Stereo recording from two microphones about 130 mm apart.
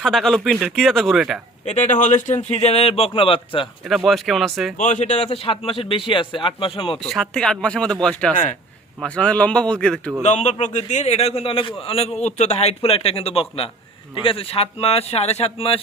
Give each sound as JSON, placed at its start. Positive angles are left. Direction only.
{"t": 0.0, "sound": "speech", "side_deg": 0}
{"t": 1.6, "sound": "speech", "side_deg": 65}
{"t": 3.8, "sound": "speech", "side_deg": 0}
{"t": 4.8, "sound": "a man's voice", "side_deg": 75}
{"t": 7.0, "sound": "a man's voice", "side_deg": 5}
{"t": 10.2, "sound": "a man's voice", "side_deg": 60}